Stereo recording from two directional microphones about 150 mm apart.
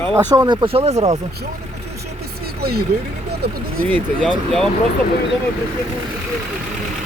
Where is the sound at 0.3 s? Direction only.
30° right (ahead or behind); by 1.2 s 50° right (ahead or behind).